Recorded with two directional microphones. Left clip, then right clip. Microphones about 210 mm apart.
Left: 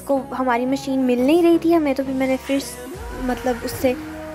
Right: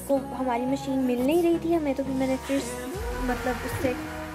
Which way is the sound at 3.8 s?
25° left (ahead or behind).